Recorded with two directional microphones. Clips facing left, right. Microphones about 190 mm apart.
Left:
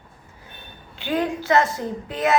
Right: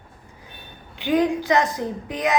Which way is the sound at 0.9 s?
15° right (ahead or behind).